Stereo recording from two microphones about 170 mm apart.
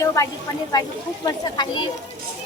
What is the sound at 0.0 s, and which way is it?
A woman's voice, 15° left (ahead or behind).